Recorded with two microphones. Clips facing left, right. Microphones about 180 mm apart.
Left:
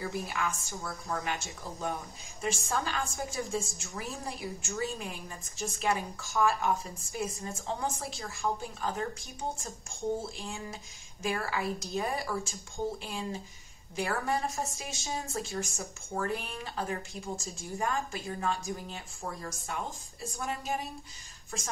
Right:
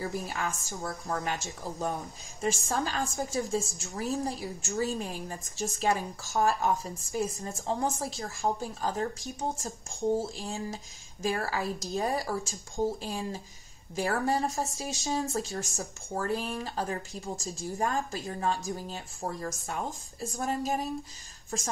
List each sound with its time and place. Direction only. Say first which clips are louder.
0.0 s a woman's voice: right 1 dB; 40° right (ahead or behind)